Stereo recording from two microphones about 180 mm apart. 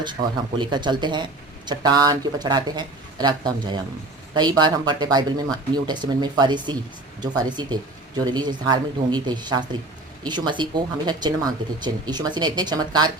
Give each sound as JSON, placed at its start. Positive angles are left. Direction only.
{"t": 0.6, "sound": "speech", "side_deg": -25}